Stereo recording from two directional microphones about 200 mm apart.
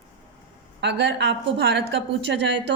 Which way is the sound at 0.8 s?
60° right (ahead or behind).